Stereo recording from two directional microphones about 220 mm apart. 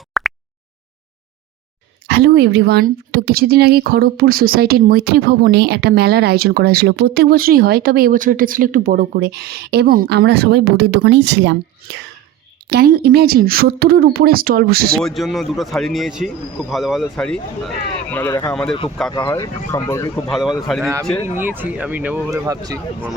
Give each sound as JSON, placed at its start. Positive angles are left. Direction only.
{"t": 0.1, "sound": "a sound", "side_deg": 0}
{"t": 2.0, "sound": "speech", "side_deg": -50}
{"t": 12.6, "sound": "speech", "side_deg": -45}
{"t": 15.0, "sound": "a man's voice", "side_deg": 0}
{"t": 18.5, "sound": "a man's voice", "side_deg": 0}
{"t": 19.1, "sound": "speech", "side_deg": 20}
{"t": 20.3, "sound": "a man's voice", "side_deg": 0}